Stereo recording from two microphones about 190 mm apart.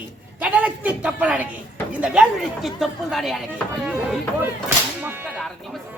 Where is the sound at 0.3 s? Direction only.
10° right (ahead or behind).